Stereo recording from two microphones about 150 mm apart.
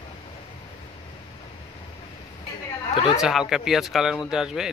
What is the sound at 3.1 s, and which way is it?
Speech, 5° right (ahead or behind).